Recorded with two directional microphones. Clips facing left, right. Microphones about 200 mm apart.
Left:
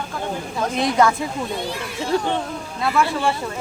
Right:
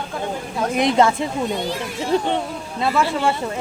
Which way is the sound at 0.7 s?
20° right (ahead or behind).